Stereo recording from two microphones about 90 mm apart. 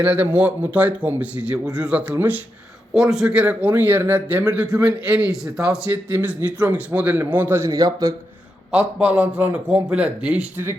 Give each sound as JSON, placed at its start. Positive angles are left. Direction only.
{"t": 0.0, "sound": "a man's voice", "side_deg": -15}
{"t": 2.9, "sound": "a man's voice", "side_deg": -5}
{"t": 5.9, "sound": "a man's voice", "side_deg": -20}
{"t": 7.6, "sound": "a man's voice", "side_deg": -40}
{"t": 8.7, "sound": "a man's voice", "side_deg": -15}